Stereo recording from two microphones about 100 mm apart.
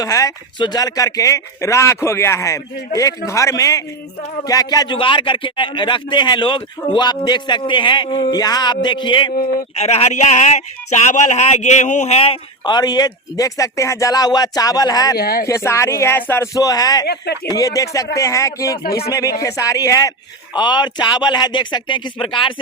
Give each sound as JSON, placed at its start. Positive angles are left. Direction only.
{"t": 0.0, "sound": "speech", "side_deg": 35}
{"t": 4.9, "sound": "speech", "side_deg": 60}
{"t": 9.7, "sound": "speech", "side_deg": 90}
{"t": 12.0, "sound": "speech", "side_deg": 80}
{"t": 12.6, "sound": "speech", "side_deg": 45}
{"t": 16.6, "sound": "speech", "side_deg": 35}